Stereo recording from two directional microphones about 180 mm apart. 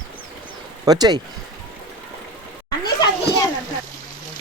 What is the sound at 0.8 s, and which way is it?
Speech, 20° right (ahead or behind).